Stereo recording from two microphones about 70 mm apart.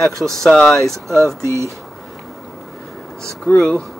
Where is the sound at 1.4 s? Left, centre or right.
Right.